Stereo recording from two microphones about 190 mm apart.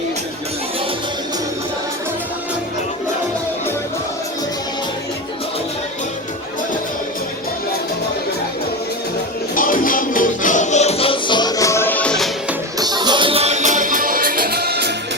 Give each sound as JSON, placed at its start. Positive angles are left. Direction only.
{"t": 9.6, "sound": "music", "side_deg": 45}
{"t": 12.8, "sound": "music", "side_deg": -25}